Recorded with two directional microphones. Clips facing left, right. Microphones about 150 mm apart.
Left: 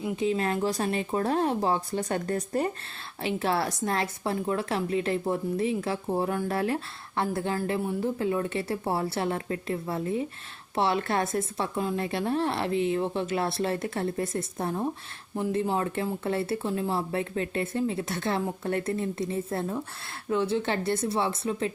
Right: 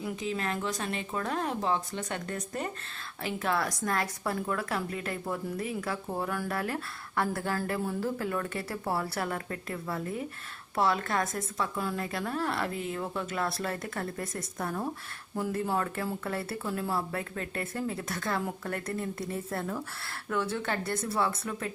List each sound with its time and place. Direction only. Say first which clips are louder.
0.0 s a woman's voice: left 6 dB; 30° left (ahead or behind)